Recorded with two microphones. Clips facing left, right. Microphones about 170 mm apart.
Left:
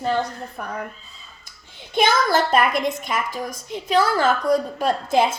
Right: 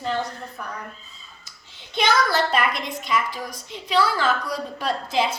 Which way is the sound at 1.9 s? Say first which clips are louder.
Left 3 dB; 50° left (ahead or behind).